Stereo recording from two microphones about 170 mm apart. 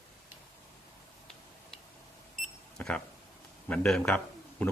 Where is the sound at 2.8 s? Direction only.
5° left (ahead or behind).